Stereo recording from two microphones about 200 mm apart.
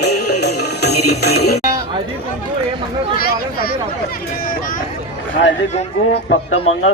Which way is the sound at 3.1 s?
50° left (ahead or behind).